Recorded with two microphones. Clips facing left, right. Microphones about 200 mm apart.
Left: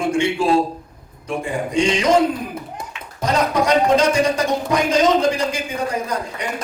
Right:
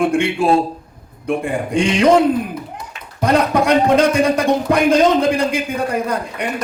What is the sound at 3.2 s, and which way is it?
Speech, 55° right (ahead or behind).